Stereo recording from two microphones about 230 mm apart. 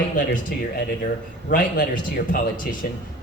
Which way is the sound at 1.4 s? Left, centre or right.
Left.